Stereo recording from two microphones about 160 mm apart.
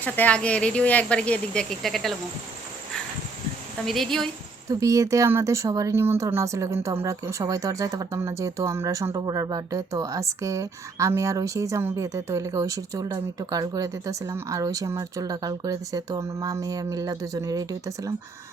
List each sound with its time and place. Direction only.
0.0 s speech: 10° left (ahead or behind)
3.8 s a woman's voice: centre (ahead or behind)
4.7 s speech: 20° right (ahead or behind)